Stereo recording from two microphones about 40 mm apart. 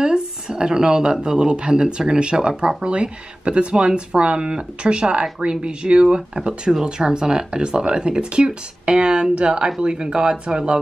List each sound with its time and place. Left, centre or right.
0.0 s speech: centre